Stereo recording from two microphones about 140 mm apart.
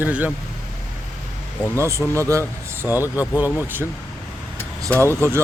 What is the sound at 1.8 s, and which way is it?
Speech, 20° right (ahead or behind).